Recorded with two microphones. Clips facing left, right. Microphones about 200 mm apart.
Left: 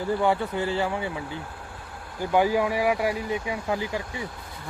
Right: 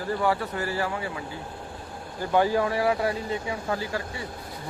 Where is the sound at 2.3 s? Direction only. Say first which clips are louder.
Left 1 dB; 10° left (ahead or behind).